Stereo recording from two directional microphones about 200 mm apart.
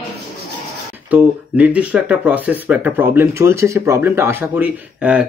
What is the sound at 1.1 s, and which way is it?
Speech, 5° right (ahead or behind).